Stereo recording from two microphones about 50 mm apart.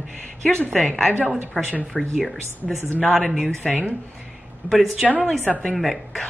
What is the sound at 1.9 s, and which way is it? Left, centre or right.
Speech, centre.